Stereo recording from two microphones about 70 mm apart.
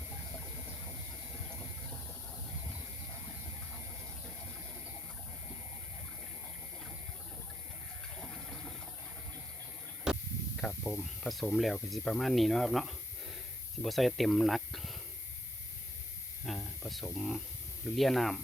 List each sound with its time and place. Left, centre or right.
8.1 s water: centre
10.1 s a sound: centre
10.7 s speech: left
11.0 s speech: centre
16.5 s spray: centre
16.8 s a sound: centre
17.2 s speech: centre